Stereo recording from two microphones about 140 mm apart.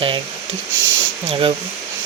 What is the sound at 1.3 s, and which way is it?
Speech, 40° right (ahead or behind).